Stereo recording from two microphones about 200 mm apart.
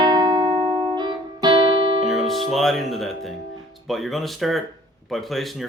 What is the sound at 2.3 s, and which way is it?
Speech, centre (ahead or behind).